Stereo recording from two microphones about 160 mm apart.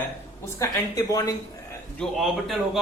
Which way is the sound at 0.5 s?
20° left (ahead or behind).